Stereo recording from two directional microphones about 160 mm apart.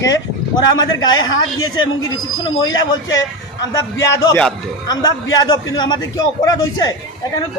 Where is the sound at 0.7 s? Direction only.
25° left (ahead or behind).